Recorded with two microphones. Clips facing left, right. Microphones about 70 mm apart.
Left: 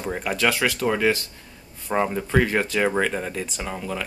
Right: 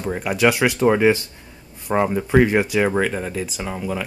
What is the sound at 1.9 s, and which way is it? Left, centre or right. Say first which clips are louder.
Speech: right 4 dB; centre.